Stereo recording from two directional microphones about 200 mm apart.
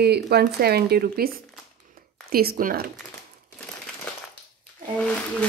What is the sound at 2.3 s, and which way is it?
Speech, 50° right (ahead or behind).